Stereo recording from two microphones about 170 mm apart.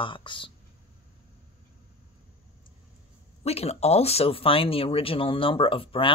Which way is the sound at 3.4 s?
35° left (ahead or behind).